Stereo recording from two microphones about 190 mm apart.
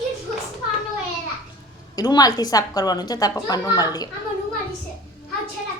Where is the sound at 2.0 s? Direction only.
20° left (ahead or behind).